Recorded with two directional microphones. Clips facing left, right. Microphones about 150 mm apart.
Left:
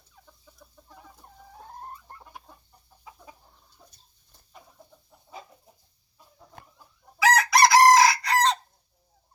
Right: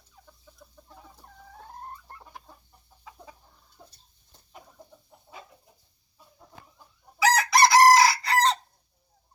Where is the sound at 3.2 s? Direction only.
30° right (ahead or behind).